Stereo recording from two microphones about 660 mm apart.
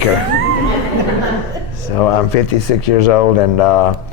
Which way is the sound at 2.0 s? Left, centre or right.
Left.